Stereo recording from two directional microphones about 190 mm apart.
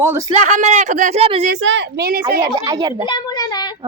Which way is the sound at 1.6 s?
70° right (ahead or behind).